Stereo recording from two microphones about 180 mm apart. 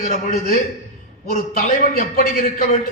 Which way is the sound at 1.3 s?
50° left (ahead or behind).